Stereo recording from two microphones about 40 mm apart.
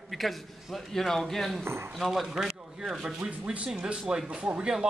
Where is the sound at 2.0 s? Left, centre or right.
Centre.